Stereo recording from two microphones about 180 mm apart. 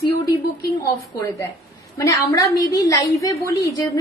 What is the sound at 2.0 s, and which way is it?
A woman's voice, 20° left (ahead or behind).